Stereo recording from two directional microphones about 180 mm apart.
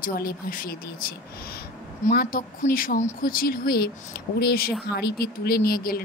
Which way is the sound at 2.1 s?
55° left (ahead or behind).